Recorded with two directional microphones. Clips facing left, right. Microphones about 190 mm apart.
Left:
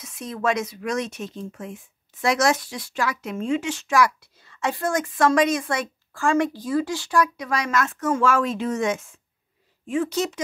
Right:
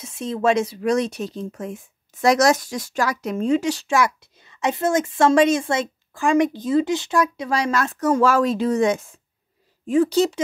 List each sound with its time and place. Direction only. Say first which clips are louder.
0.0 s speech: right 5 dB; 30° right (ahead or behind)